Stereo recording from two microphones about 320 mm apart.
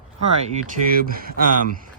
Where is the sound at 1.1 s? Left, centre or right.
Right.